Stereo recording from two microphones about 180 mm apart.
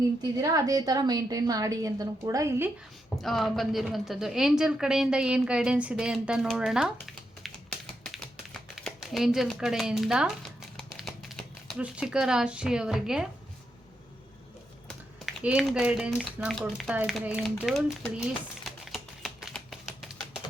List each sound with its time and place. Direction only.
0.3 s a woman's voice: 20° right (ahead or behind)
3.2 s a woman's voice: centre (ahead or behind)
8.0 s typing: centre (ahead or behind)
8.7 s a sound: centre (ahead or behind)
11.8 s a woman's voice: 5° right (ahead or behind)
15.4 s a woman's voice: 5° right (ahead or behind)
18.2 s typewriter: centre (ahead or behind)